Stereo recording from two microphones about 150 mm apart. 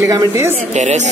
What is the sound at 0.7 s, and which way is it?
Speech, 50° right (ahead or behind).